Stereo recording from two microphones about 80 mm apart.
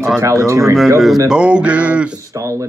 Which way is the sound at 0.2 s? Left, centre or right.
Right.